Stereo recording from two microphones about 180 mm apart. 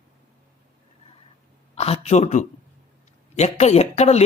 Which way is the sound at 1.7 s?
35° left (ahead or behind).